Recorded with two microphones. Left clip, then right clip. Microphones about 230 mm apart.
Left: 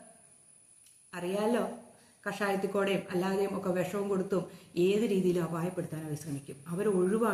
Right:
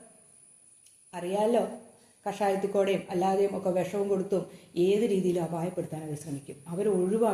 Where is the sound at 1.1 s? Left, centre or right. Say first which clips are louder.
Right 5 dB; centre.